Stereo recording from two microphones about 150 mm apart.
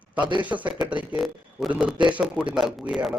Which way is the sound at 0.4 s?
10° right (ahead or behind).